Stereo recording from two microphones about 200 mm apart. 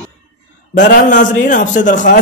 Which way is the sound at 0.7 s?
40° left (ahead or behind).